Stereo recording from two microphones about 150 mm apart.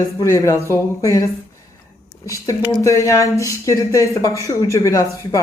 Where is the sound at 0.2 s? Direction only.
20° left (ahead or behind).